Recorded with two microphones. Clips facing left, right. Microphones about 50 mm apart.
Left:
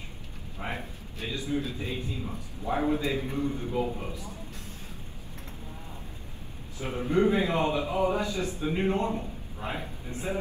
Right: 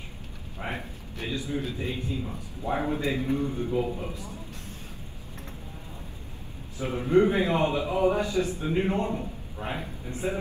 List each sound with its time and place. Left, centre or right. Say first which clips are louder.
0.6 s a man's voice: right 1 dB; right
6.8 s a man's voice: right 3 dB; right